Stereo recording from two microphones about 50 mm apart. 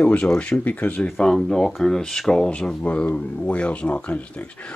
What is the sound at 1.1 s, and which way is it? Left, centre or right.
Speech, centre.